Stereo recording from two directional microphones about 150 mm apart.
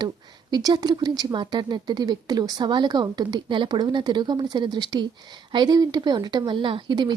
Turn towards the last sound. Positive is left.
turn(degrees=-30)  # may be behind; listen again after turning